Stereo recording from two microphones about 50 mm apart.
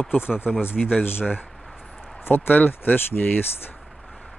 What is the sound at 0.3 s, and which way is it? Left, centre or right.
Speech, centre.